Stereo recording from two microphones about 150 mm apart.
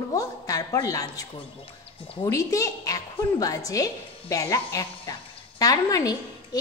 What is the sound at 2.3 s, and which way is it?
A woman's voice, 20° left (ahead or behind).